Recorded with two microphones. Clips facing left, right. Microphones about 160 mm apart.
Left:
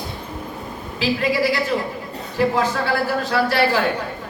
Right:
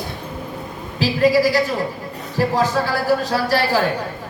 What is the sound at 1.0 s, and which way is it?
A man's voice, 40° right (ahead or behind).